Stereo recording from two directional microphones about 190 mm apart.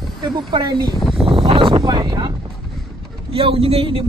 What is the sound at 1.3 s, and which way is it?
Speech, 30° right (ahead or behind).